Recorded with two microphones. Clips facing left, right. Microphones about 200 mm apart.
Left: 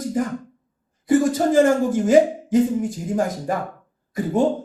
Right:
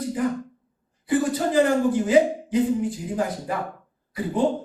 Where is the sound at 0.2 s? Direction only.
45° left (ahead or behind).